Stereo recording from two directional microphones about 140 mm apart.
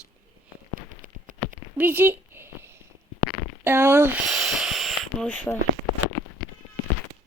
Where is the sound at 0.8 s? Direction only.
70° right (ahead or behind).